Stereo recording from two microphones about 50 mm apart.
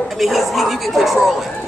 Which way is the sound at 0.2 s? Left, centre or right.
Centre.